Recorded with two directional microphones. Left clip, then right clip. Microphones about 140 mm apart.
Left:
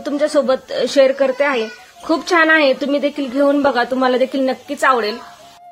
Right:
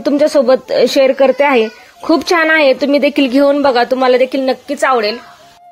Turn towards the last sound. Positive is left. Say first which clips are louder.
# right 3 dB
turn(degrees=-20)  # may be behind; listen again after turning